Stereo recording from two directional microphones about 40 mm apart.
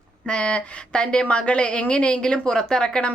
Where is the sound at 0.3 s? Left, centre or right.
Left.